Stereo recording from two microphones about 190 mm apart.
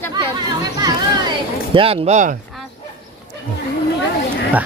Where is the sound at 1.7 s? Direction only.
30° right (ahead or behind).